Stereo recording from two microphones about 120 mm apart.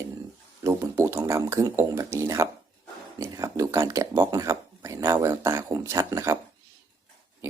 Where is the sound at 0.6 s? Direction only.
25° right (ahead or behind).